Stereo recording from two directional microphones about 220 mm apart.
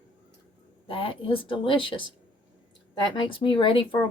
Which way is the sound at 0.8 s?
25° left (ahead or behind).